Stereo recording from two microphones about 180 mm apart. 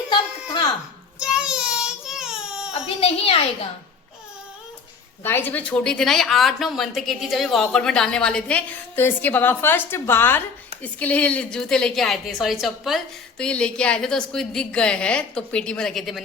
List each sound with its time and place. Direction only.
1.2 s child singing: 5° right (ahead or behind)
3.0 s a sound: 35° left (ahead or behind)
5.2 s a woman's voice: 10° left (ahead or behind)